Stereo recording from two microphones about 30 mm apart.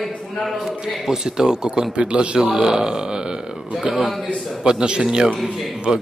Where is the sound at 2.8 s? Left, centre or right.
Right; by 4.2 s centre.